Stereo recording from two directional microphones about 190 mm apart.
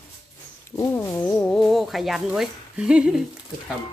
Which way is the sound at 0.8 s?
15° left (ahead or behind).